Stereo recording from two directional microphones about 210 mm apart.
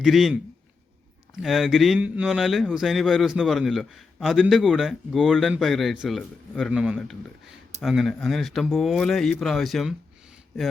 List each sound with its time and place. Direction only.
0.0 s a man's voice: centre (ahead or behind)
1.4 s a man's voice: centre (ahead or behind)